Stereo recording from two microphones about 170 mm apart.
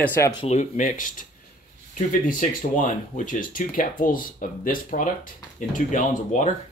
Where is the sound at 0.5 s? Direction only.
45° left (ahead or behind).